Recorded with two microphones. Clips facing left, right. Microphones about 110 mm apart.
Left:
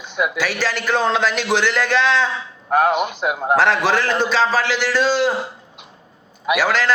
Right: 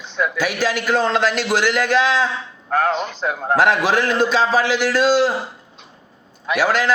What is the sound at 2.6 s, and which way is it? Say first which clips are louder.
Speech: left 3 dB; 15° left (ahead or behind).